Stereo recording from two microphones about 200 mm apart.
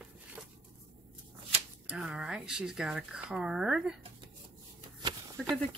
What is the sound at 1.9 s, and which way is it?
Speech, 5° right (ahead or behind).